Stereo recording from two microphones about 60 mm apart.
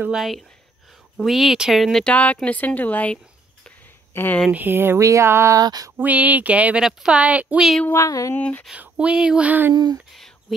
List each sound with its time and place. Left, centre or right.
0.1 s speech: centre
2.1 s a woman's voice: left
4.1 s speech: left
4.5 s speech: right
5.0 s a sound: right
5.6 s a sound: right
5.9 s speech: right
6.8 s speech: centre
7.2 s speech: right
7.9 s a sound: left
8.4 s a woman's voice: left
8.7 s speech: centre
9.5 s speech: right